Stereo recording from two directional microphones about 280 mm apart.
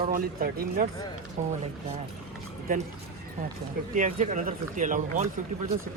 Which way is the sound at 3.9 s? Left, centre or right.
Right.